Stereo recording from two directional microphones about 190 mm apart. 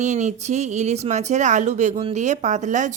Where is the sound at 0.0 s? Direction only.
40° right (ahead or behind).